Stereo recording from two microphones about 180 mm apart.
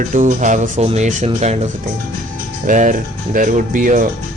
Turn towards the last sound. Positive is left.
turn(degrees=-45)  # may be behind; listen again after turning